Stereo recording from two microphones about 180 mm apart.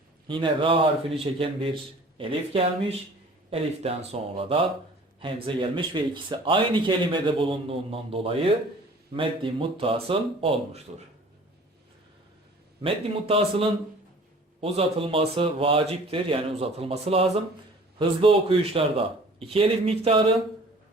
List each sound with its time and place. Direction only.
0.3 s speech: 30° right (ahead or behind)
12.8 s speech: 30° right (ahead or behind)